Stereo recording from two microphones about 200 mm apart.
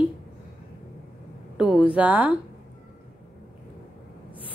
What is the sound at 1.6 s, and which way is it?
Speech, centre (ahead or behind).